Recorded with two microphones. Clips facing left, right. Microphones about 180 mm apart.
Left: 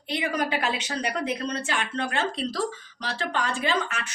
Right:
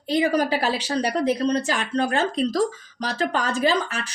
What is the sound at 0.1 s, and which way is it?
A woman's voice, 35° right (ahead or behind).